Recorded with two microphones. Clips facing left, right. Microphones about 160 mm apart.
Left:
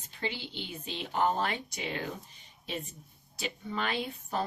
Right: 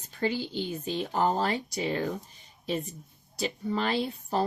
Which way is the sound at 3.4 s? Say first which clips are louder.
Right 6 dB; 35° right (ahead or behind).